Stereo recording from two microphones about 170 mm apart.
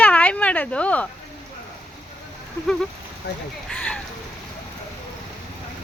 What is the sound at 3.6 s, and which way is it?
Speech, 5° left (ahead or behind).